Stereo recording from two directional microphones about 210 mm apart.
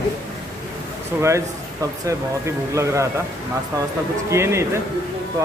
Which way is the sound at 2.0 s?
15° right (ahead or behind).